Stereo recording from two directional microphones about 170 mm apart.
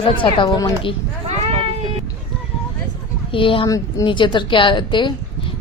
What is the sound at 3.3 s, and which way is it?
A child's voice, 30° left (ahead or behind).